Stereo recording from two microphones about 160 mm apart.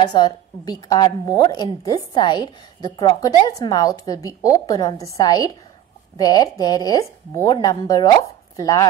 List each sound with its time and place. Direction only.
0.0 s a woman's voice: 25° left (ahead or behind)